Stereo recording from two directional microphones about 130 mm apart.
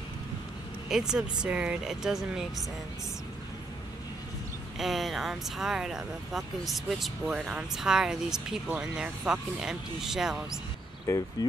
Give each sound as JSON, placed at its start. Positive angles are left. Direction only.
{"t": 0.8, "sound": "speech", "side_deg": -5}
{"t": 4.7, "sound": "speech", "side_deg": 0}
{"t": 11.1, "sound": "speech", "side_deg": 20}